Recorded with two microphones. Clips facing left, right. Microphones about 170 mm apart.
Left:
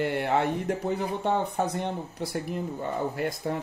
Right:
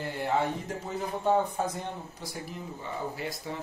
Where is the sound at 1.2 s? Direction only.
70° left (ahead or behind).